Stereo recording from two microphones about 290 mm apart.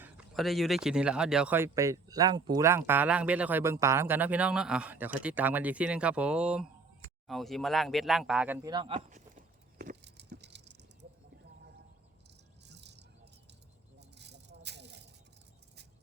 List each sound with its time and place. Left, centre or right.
0.0 s speech: centre
9.0 s a sound: right
12.6 s rattle: right
14.2 s rattle: right